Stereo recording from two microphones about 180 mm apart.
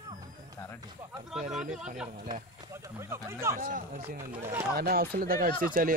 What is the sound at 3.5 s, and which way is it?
Speech, 45° right (ahead or behind).